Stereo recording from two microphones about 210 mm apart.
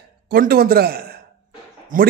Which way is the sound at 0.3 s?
45° right (ahead or behind).